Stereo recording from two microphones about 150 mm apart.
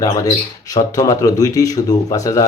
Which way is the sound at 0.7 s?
25° left (ahead or behind).